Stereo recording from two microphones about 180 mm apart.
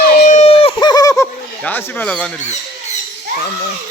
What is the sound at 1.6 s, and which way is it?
Speech, 10° left (ahead or behind).